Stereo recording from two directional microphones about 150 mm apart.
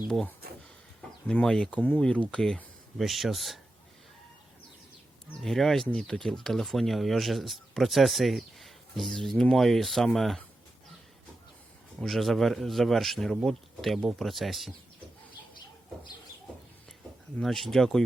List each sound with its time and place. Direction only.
1.3 s speech: 5° left (ahead or behind)
5.4 s speech: centre (ahead or behind)
11.9 s speech: centre (ahead or behind)
17.3 s speech: centre (ahead or behind)